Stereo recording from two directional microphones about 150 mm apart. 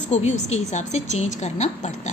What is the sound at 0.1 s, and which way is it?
A woman's voice, 50° left (ahead or behind).